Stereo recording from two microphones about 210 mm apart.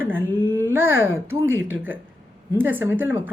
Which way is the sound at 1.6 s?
10° right (ahead or behind).